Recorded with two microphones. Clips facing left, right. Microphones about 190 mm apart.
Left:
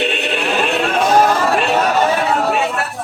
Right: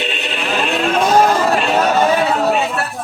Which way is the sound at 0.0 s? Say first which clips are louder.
Left 4 dB; 65° left (ahead or behind).